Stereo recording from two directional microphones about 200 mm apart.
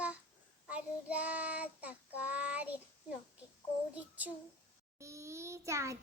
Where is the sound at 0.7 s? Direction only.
5° right (ahead or behind).